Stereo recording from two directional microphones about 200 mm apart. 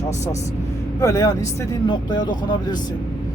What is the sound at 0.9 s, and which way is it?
Speech, 15° left (ahead or behind).